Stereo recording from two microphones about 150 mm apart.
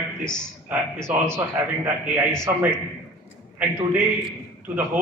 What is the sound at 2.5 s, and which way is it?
Speech, 15° right (ahead or behind).